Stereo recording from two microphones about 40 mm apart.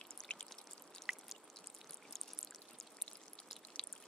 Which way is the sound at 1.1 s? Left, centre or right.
Right.